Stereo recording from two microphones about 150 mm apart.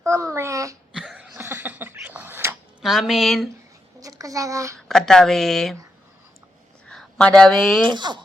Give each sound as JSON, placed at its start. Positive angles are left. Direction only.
{"t": 0.0, "sound": "a sound", "side_deg": -20}
{"t": 0.9, "sound": "cough", "side_deg": -5}
{"t": 2.8, "sound": "speech", "side_deg": 0}
{"t": 4.0, "sound": "speech", "side_deg": -25}
{"t": 4.9, "sound": "speech", "side_deg": 5}
{"t": 6.8, "sound": "a sound", "side_deg": 5}
{"t": 7.9, "sound": "speech", "side_deg": -30}